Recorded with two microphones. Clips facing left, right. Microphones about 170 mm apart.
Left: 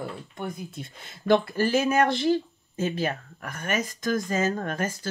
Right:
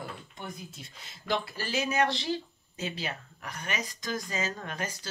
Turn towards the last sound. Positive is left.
turn(degrees=50)  # may be behind; listen again after turning